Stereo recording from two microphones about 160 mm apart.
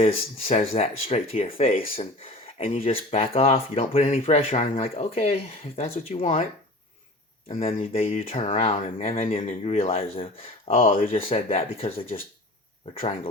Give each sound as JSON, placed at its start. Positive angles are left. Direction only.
{"t": 0.4, "sound": "speech", "side_deg": 40}
{"t": 7.4, "sound": "speech", "side_deg": 40}